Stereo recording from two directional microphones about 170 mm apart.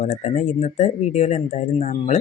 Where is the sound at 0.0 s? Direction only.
45° left (ahead or behind).